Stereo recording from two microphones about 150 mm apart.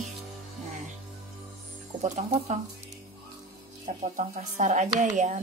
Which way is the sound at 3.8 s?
55° right (ahead or behind).